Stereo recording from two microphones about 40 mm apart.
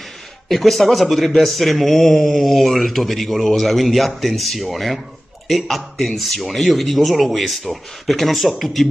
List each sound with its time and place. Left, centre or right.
0.5 s a man's voice: centre